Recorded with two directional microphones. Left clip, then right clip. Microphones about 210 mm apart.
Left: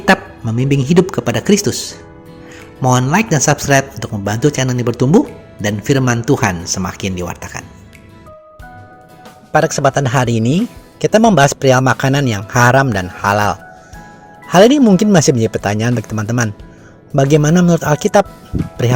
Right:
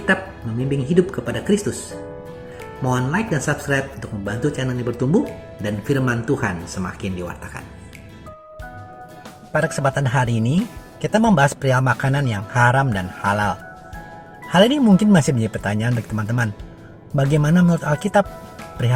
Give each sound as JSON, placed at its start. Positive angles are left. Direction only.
{"t": 0.6, "sound": "speech", "side_deg": 40}
{"t": 2.8, "sound": "speech", "side_deg": 40}
{"t": 9.5, "sound": "speech", "side_deg": 35}